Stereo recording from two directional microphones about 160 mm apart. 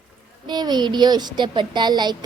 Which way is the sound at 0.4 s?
25° right (ahead or behind).